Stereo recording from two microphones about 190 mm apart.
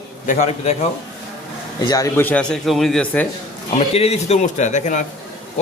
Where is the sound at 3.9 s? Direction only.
35° left (ahead or behind).